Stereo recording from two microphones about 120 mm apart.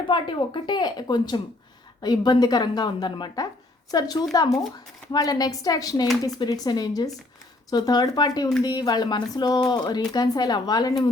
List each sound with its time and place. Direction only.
0.1 s speech: 40° left (ahead or behind)